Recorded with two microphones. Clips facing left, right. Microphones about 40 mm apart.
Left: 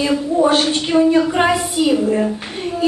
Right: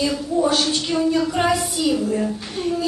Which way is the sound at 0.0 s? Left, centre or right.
Left.